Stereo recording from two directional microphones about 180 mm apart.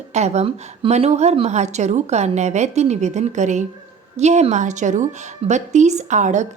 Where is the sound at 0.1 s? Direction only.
40° right (ahead or behind).